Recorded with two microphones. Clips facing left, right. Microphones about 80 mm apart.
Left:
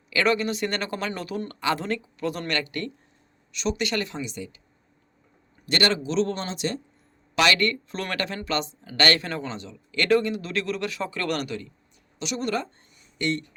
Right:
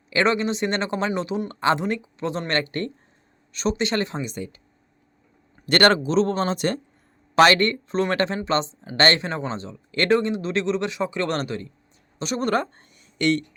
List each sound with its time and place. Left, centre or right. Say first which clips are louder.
0.1 s speech: right 2 dB; right
5.6 s speech: right 6 dB; right
7.3 s speech: right 6 dB; right